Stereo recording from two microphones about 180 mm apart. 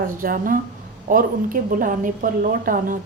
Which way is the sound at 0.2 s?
50° right (ahead or behind).